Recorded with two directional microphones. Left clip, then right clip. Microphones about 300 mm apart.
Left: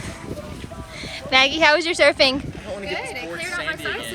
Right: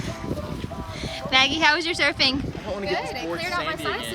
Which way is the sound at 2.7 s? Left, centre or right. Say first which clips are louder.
Right 1 dB; right.